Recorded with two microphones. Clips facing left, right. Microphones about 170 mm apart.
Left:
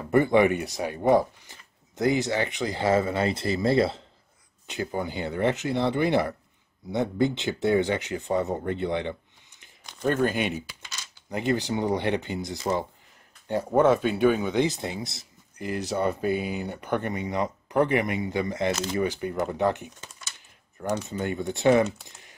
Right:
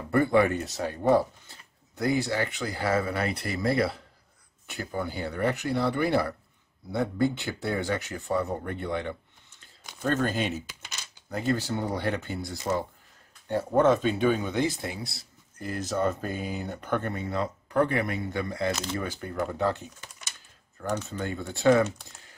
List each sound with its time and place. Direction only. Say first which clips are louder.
0.1 s speech: left 2 dB; 20° left (ahead or behind)
10.0 s speech: left 3 dB; 15° left (ahead or behind)
20.9 s speech: left 3 dB; 15° left (ahead or behind)